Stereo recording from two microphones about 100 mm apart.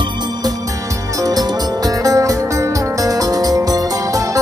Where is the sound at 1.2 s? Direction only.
40° right (ahead or behind).